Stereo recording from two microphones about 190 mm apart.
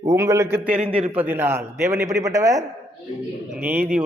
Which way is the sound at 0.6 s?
35° right (ahead or behind).